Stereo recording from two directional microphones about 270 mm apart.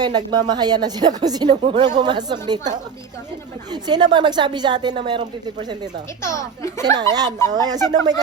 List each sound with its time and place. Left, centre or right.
0.0 s speech: centre
6.2 s speech: centre
6.9 s speech: centre